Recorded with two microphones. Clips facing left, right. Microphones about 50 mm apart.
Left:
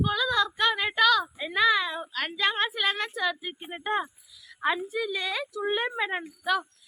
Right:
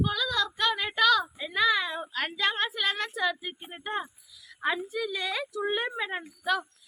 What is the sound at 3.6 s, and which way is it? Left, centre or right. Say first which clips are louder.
Speech: left 5 dB; left.